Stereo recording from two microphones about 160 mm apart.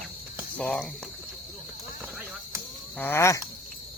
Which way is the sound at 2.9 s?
15° left (ahead or behind).